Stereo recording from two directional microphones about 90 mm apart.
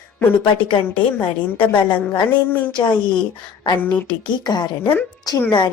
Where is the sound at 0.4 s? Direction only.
65° left (ahead or behind).